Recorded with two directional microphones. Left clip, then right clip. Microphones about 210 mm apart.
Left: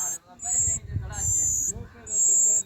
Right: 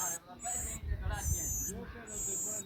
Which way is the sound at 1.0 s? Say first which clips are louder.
Left 11 dB; 40° left (ahead or behind).